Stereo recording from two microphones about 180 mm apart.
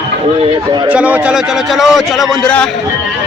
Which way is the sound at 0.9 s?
10° right (ahead or behind).